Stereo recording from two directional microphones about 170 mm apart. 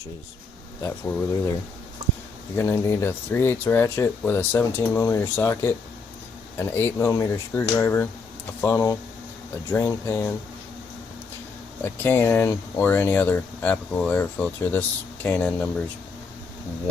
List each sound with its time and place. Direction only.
0.8 s speech: 15° left (ahead or behind)
2.6 s speech: 15° left (ahead or behind)
11.8 s speech: 15° left (ahead or behind)